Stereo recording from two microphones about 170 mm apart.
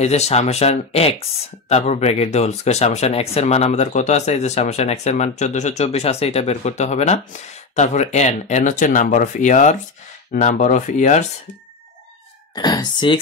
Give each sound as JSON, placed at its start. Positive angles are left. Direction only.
{"t": 0.0, "sound": "speech", "side_deg": 40}
{"t": 12.5, "sound": "speech", "side_deg": 25}